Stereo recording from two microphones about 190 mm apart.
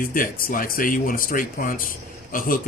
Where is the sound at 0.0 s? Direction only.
45° left (ahead or behind).